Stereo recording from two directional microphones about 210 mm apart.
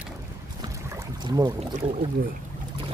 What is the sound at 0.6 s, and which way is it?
Boat, 15° right (ahead or behind).